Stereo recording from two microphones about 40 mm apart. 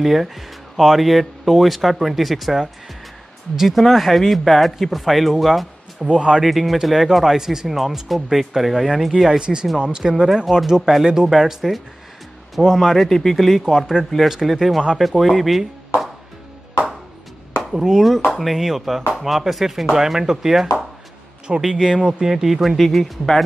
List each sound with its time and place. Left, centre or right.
0.0 s speech: centre
6.0 s speech: right
6.4 s speech: centre
9.4 s speech: right
10.2 s speech: centre
12.5 s speech: centre
17.6 s speech: centre